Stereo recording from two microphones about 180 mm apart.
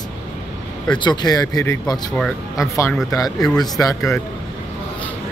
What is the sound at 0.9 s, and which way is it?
Speech, 25° left (ahead or behind).